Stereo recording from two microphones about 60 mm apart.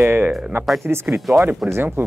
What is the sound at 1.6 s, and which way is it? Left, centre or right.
Speech, centre.